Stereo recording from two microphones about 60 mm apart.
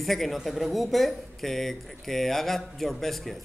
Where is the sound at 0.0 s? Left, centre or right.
Centre.